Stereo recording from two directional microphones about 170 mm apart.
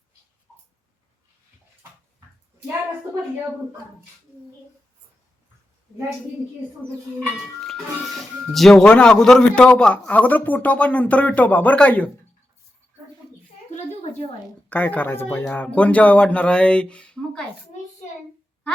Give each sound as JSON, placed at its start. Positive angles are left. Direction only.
{"t": 8.5, "sound": "a man's voice", "side_deg": 5}
{"t": 13.7, "sound": "a sound", "side_deg": 40}
{"t": 14.7, "sound": "a man's voice", "side_deg": 10}